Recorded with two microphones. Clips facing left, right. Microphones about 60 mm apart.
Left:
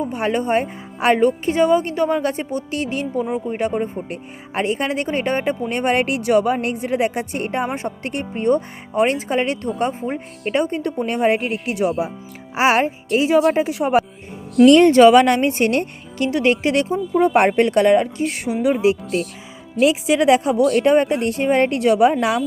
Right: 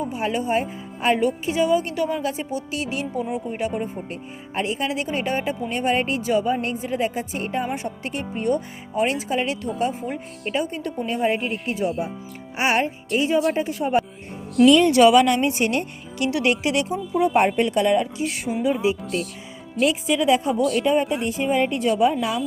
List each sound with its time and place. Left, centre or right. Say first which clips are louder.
0.1 s speech: left 4 dB; left
11.7 s speech: left 5 dB; left
13.2 s speech: left 6 dB; left
14.5 s speech: left 4 dB; centre
14.8 s speech: left 4 dB; left
16.2 s speech: left 4 dB; left
17.3 s speech: left 4 dB; left
18.6 s speech: left 5 dB; left
20.5 s speech: left 5 dB; centre
20.8 s speech: left 5 dB; left